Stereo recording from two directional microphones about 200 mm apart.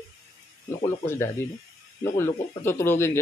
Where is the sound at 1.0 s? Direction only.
15° left (ahead or behind).